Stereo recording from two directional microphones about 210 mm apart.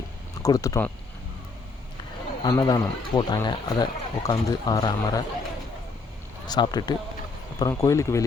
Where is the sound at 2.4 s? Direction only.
20° left (ahead or behind).